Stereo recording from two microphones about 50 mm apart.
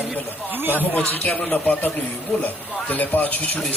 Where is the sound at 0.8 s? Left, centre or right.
Left.